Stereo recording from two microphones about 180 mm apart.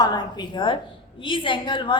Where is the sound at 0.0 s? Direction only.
20° left (ahead or behind).